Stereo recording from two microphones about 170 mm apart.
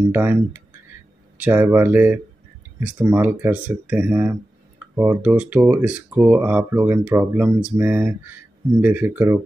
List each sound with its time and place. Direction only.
0.1 s speech: 10° right (ahead or behind)